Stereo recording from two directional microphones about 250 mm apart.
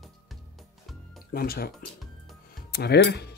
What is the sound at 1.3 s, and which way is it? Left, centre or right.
Speech, left.